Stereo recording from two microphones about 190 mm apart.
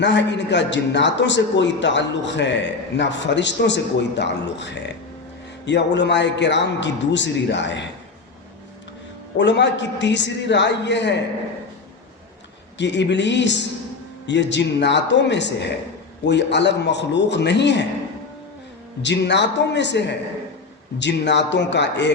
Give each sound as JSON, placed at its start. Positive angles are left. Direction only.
{"t": 0.0, "sound": "a man's voice", "side_deg": 70}
{"t": 9.4, "sound": "a man's voice", "side_deg": 70}
{"t": 12.7, "sound": "a man's voice", "side_deg": 70}
{"t": 19.0, "sound": "a man's voice", "side_deg": 65}